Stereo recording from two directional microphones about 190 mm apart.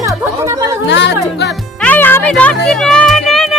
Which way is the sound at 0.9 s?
65° left (ahead or behind).